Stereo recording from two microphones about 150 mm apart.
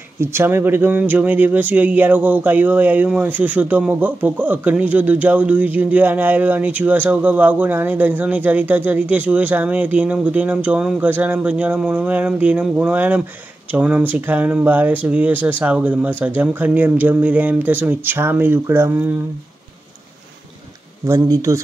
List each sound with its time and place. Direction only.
0.2 s speech: 15° right (ahead or behind)
21.1 s speech: 20° right (ahead or behind)